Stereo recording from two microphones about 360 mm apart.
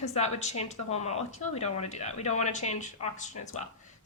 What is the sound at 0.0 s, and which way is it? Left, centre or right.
A woman's voice, centre.